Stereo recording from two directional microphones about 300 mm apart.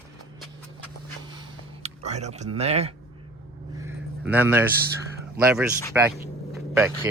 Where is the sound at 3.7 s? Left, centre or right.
Centre.